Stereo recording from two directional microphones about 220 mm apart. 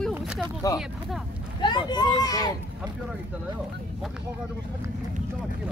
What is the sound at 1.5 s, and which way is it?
Speech, 20° left (ahead or behind).